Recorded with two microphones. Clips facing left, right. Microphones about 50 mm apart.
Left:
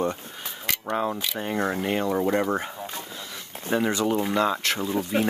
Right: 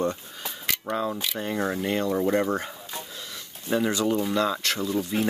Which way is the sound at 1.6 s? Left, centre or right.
Centre.